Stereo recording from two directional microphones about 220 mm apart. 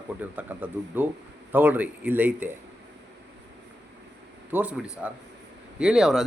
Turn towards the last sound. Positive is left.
turn(degrees=0)  # may be behind; listen again after turning